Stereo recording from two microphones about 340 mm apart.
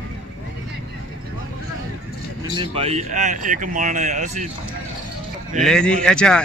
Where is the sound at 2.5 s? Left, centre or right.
Centre.